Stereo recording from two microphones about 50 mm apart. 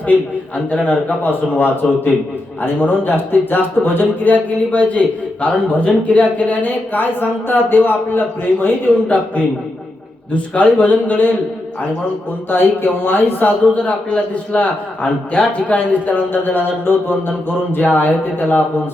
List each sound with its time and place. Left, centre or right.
0.5 s a man's voice: left
1.2 s a man's voice: left
9.0 s a man's voice: left
12.5 s speech: left
13.7 s a man's voice: left